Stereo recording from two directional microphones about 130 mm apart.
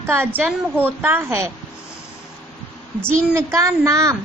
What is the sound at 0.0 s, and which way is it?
A woman's voice, 15° right (ahead or behind).